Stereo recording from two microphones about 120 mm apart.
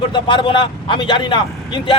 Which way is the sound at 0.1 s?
40° left (ahead or behind).